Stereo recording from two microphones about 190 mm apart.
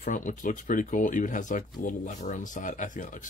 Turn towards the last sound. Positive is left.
turn(degrees=40)  # may be behind; listen again after turning